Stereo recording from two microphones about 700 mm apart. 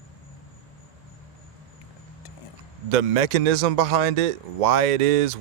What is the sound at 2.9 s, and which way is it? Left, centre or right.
A man's voice, right.